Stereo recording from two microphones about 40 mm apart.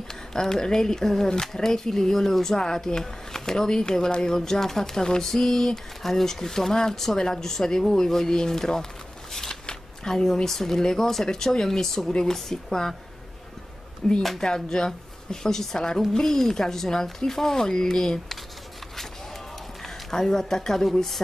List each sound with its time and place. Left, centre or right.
0.1 s speech: centre
9.3 s scissors: centre
9.7 s speech: centre
12.1 s a woman's voice: left
12.4 s speech: centre
14.0 s speech: centre
19.8 s speech: centre